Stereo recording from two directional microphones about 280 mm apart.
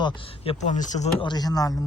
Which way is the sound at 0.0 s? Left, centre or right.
Left.